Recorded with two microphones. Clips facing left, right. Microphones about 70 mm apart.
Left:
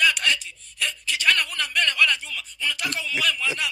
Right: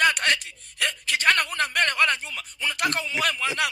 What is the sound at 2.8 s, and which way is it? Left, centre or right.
Speech, right.